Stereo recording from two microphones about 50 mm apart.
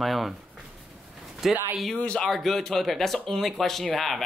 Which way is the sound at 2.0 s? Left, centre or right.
Left.